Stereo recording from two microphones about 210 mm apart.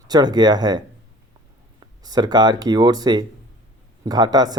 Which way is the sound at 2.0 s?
20° right (ahead or behind).